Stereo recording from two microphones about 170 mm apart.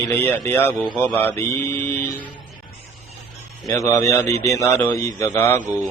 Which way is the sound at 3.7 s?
20° left (ahead or behind).